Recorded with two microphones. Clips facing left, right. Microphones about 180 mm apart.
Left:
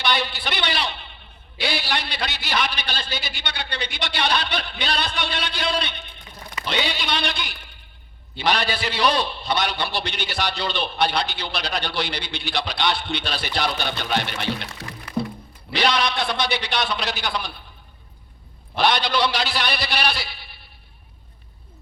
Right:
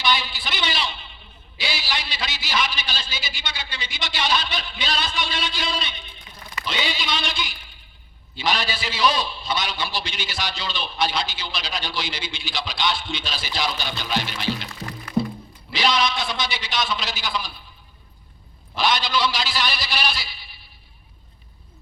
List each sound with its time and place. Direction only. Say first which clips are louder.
0.0 s a sound: left 1 dB; 60° left (ahead or behind)
6.7 s a man's voice: left 2 dB; 60° left (ahead or behind)
18.8 s a man's voice: left 2 dB; 60° left (ahead or behind)